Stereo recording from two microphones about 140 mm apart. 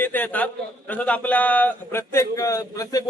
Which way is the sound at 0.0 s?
10° left (ahead or behind).